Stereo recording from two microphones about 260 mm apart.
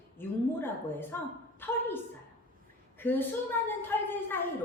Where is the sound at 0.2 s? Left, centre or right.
Centre.